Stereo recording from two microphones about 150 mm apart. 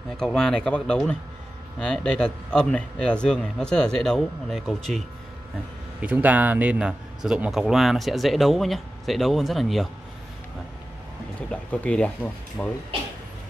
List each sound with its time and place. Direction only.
0.2 s a man's voice: 5° left (ahead or behind)
5.9 s a man's voice: 10° right (ahead or behind)
11.7 s speech: 10° left (ahead or behind)